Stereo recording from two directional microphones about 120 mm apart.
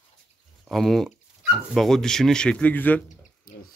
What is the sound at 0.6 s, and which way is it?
Speech, centre (ahead or behind).